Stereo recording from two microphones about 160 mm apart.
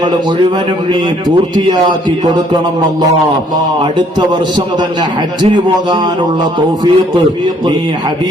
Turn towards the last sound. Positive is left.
turn(degrees=-30)  # may be behind; listen again after turning